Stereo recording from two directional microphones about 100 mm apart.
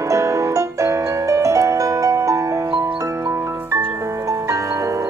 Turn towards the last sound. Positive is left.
turn(degrees=-30)  # may be behind; listen again after turning